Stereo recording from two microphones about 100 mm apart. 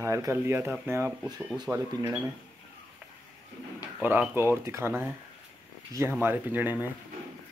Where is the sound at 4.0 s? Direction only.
20° right (ahead or behind).